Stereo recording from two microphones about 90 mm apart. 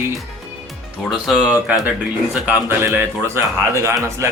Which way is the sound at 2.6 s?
25° right (ahead or behind).